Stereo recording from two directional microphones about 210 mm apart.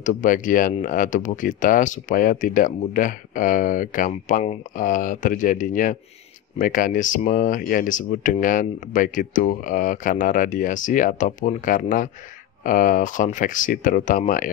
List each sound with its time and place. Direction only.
0.0 s speech: 40° left (ahead or behind)